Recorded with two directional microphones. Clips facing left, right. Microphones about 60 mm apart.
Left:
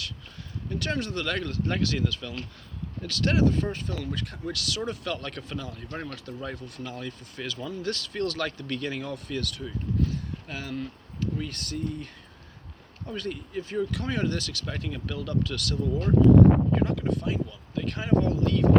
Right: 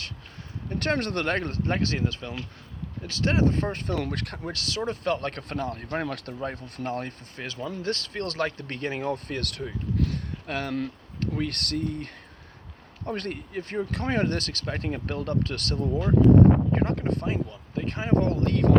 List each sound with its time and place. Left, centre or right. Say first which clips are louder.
0.7 s speech: right 4 dB; right
4.4 s speech: right 1 dB; right
6.4 s speech: right 4 dB; right
18.2 s speech: even; right